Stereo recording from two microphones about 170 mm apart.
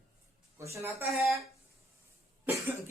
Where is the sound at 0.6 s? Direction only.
15° right (ahead or behind).